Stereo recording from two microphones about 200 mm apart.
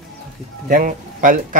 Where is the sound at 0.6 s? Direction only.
45° right (ahead or behind).